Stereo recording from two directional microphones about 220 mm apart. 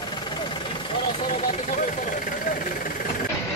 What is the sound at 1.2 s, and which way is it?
Speech, 35° left (ahead or behind).